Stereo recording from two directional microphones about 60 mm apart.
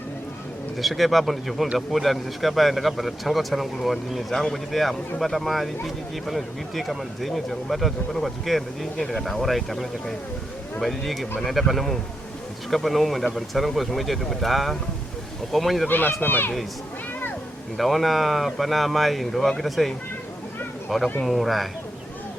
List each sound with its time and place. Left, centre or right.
0.8 s speech: centre
15.9 s speech: left
17.7 s speech: centre
21.2 s speech: centre